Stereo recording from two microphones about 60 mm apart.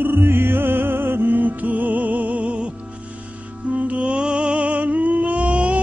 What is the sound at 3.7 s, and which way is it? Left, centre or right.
Music, right.